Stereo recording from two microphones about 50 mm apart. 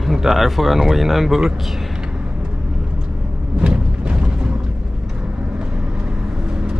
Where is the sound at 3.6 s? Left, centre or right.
Right.